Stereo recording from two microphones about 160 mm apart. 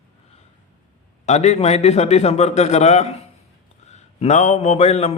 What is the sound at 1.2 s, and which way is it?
A man's voice, 45° left (ahead or behind).